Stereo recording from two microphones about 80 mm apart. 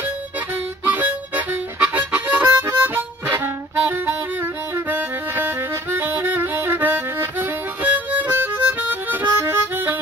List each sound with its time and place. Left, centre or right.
0.8 s harmonica: right